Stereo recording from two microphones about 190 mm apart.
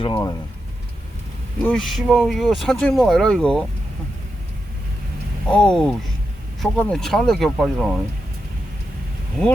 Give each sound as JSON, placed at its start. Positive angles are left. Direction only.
{"t": 0.0, "sound": "speech", "side_deg": 25}
{"t": 1.6, "sound": "speech", "side_deg": 0}
{"t": 5.5, "sound": "speech", "side_deg": 5}